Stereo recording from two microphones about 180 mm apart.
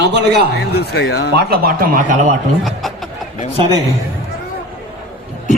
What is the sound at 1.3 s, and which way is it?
Speech, 60° right (ahead or behind).